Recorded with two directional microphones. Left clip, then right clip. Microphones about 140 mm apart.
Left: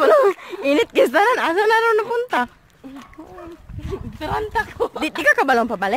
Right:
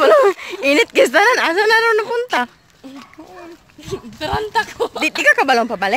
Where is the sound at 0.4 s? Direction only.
10° right (ahead or behind).